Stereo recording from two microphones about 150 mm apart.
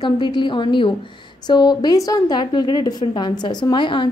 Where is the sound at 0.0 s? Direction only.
30° left (ahead or behind).